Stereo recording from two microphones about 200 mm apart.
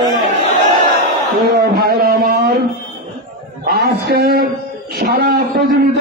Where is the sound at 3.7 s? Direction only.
55° right (ahead or behind).